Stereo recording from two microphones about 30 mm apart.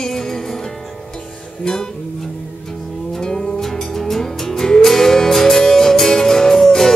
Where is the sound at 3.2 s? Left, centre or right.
Left.